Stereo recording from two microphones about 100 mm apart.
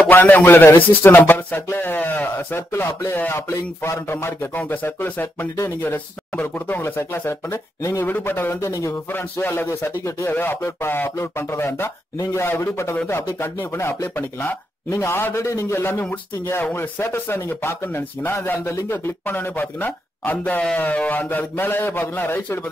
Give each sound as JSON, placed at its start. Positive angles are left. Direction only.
{"t": 0.1, "sound": "speech", "side_deg": 20}
{"t": 8.5, "sound": "speech", "side_deg": 30}
{"t": 9.1, "sound": "speech", "side_deg": 20}